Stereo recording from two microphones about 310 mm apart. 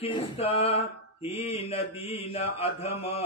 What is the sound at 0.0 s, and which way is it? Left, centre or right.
Speech, centre.